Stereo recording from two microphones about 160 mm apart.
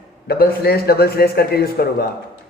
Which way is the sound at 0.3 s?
80° left.